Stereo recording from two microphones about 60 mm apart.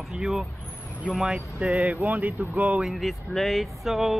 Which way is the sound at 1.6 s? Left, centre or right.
Right.